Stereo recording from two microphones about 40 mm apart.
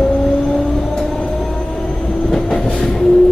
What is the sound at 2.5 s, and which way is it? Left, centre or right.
Train, left.